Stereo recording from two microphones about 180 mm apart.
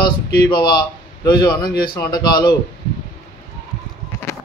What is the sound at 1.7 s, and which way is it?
Speech, 55° left (ahead or behind).